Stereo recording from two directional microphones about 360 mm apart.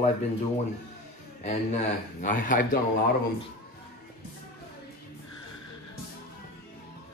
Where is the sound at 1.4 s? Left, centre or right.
Centre.